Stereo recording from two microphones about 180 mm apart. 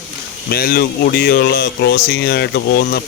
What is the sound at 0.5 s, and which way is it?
Speech, 55° left (ahead or behind).